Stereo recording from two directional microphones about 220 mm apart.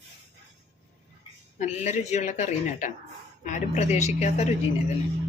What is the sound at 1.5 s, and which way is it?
A woman's voice, 30° left (ahead or behind).